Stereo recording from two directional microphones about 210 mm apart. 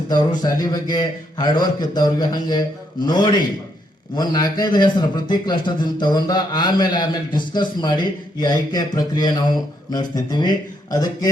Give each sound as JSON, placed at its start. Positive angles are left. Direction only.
{"t": 0.1, "sound": "a man's voice", "side_deg": 20}